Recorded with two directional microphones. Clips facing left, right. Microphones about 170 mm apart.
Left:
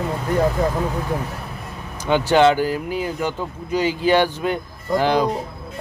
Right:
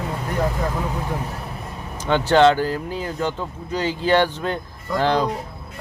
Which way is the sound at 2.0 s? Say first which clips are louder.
Even; 10° left (ahead or behind).